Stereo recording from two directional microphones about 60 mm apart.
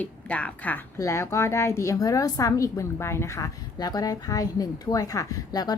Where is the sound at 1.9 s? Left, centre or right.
Left.